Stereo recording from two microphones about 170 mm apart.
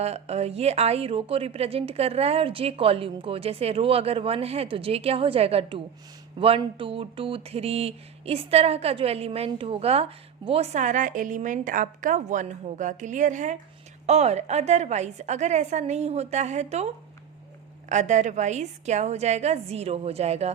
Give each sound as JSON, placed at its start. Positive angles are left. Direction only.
{"t": 0.0, "sound": "speech", "side_deg": -40}